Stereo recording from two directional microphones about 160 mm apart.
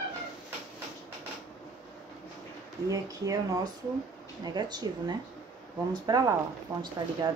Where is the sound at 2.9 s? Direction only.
20° right (ahead or behind).